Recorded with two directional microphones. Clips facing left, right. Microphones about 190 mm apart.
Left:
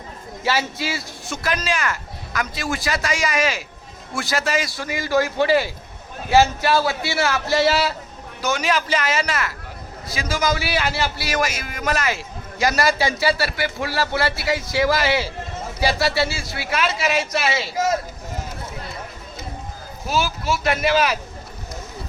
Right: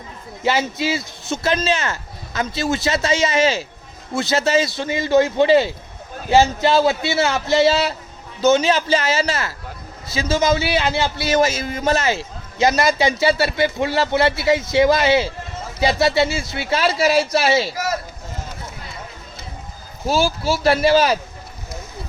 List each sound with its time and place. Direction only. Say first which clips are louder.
0.4 s a man's voice: right 4 dB; 20° right (ahead or behind)
20.1 s speech: right 4 dB; 30° right (ahead or behind)